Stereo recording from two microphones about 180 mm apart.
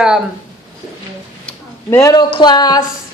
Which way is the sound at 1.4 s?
15° left (ahead or behind).